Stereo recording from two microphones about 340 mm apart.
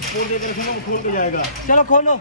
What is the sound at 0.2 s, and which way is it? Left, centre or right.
Speech, left.